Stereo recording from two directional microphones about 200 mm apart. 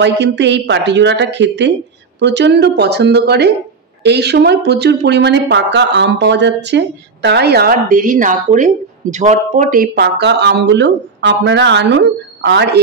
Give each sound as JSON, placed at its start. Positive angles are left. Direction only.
{"t": 0.0, "sound": "speech", "side_deg": -60}